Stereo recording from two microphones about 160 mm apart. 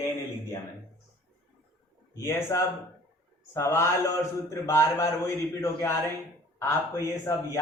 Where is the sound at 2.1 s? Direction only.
15° left (ahead or behind).